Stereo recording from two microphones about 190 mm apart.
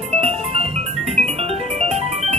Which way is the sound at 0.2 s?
30° right (ahead or behind).